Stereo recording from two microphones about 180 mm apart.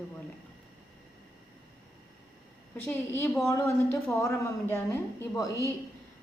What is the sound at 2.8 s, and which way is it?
A woman's voice, 10° left (ahead or behind).